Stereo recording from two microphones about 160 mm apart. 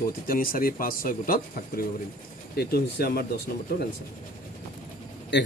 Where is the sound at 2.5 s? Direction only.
75° left (ahead or behind).